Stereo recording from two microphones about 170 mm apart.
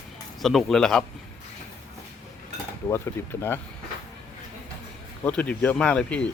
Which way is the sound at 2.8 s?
15° left (ahead or behind).